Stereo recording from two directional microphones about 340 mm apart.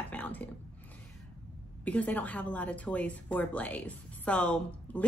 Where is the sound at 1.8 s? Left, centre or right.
Centre.